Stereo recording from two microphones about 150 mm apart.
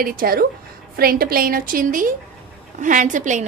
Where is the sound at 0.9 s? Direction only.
90° right.